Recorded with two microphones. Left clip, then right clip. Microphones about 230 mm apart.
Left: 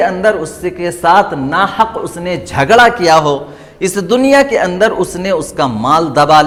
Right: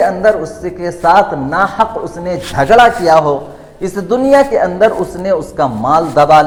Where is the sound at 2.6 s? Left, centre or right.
Left.